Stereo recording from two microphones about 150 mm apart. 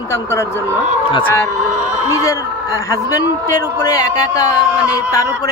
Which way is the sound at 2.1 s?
20° left (ahead or behind).